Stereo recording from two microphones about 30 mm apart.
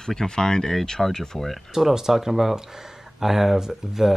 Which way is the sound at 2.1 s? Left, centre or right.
Centre.